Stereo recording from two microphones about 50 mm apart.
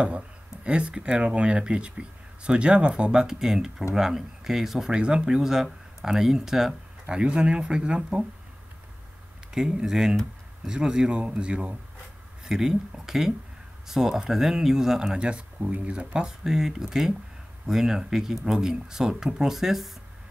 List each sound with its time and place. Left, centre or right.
0.7 s speech: right
7.2 s speech: right
9.5 s speech: centre
15.1 s speech: right